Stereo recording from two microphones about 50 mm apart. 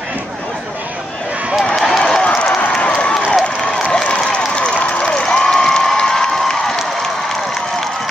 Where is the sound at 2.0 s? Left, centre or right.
Centre.